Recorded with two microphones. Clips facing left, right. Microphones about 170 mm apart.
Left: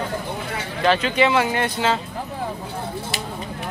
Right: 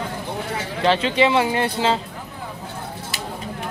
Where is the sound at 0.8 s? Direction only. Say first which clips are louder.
Even; 25° right (ahead or behind).